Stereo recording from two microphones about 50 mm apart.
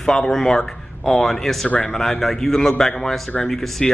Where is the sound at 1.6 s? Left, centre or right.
Left.